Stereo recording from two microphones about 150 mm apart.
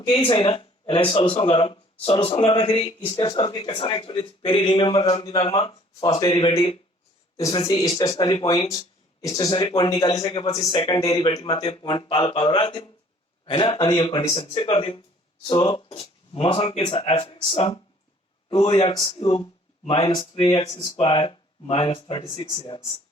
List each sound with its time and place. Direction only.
0.3 s a man's voice: 35° left (ahead or behind)
7.3 s speech: 40° left (ahead or behind)
7.7 s a man's voice: 25° left (ahead or behind)